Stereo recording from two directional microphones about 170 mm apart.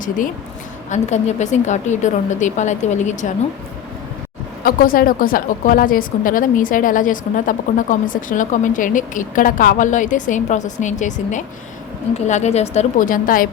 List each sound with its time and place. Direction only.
0.9 s a woman's voice: 45° left (ahead or behind)
4.6 s a woman's voice: 55° left (ahead or behind)